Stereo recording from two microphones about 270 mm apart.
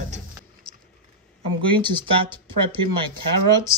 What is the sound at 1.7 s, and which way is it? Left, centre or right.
Speech, centre.